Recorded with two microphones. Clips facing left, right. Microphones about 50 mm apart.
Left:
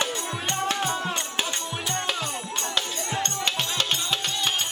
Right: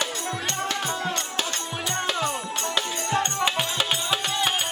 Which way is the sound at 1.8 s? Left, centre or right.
Centre.